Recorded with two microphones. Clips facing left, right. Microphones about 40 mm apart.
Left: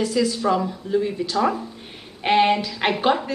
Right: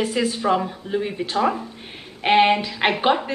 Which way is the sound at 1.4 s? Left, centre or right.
Centre.